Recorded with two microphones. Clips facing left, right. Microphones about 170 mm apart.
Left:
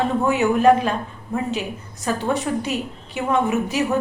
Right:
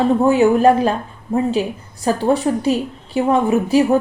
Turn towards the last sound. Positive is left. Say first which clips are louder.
# right 7 dB
turn(degrees=-30)  # may be behind; listen again after turning